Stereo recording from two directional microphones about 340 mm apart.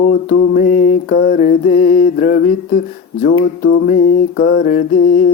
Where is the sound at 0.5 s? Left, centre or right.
Left.